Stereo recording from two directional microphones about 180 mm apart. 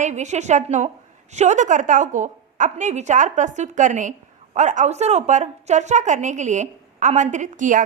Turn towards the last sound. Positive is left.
turn(degrees=-45)  # may be behind; listen again after turning